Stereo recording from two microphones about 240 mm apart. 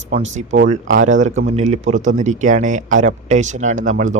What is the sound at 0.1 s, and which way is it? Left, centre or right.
Speech, right.